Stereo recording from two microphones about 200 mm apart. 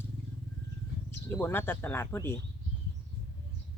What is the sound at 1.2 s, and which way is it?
Speech, 10° left (ahead or behind).